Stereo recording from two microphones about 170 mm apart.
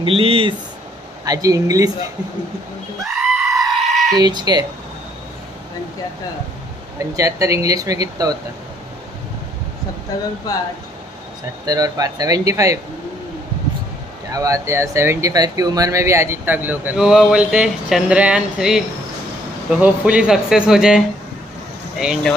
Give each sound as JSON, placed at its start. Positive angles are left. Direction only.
{"t": 0.0, "sound": "speech", "side_deg": -35}
{"t": 1.2, "sound": "speech", "side_deg": -20}
{"t": 3.1, "sound": "goat", "side_deg": 0}
{"t": 4.2, "sound": "speech", "side_deg": -25}
{"t": 7.0, "sound": "speech", "side_deg": -20}
{"t": 10.5, "sound": "speech", "side_deg": 20}
{"t": 11.6, "sound": "speech", "side_deg": -20}
{"t": 14.3, "sound": "speech", "side_deg": -20}
{"t": 22.0, "sound": "speech", "side_deg": -5}